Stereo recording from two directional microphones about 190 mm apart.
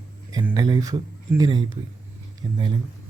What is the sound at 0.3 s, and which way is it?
A man's voice, 20° right (ahead or behind).